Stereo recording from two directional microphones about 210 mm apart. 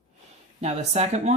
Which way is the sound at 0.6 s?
30° right (ahead or behind).